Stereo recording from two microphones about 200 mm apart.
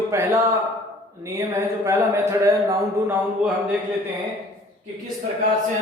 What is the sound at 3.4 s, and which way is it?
Speech, 5° right (ahead or behind).